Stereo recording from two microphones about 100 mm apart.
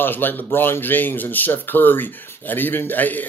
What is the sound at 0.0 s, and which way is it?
Speech, 20° left (ahead or behind).